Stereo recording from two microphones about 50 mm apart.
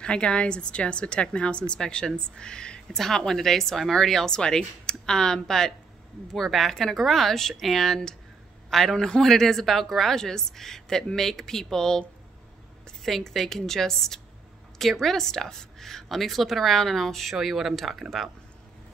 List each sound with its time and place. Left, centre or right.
0.0 s a woman's voice: centre
8.6 s a sound: centre
8.9 s a woman's voice: centre
9.2 s a woman's voice: centre
13.0 s a woman's voice: centre